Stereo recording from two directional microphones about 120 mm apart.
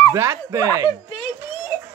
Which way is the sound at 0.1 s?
25° right (ahead or behind).